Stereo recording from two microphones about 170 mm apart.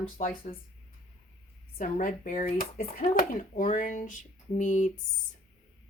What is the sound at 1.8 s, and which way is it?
Speech, 50° left (ahead or behind).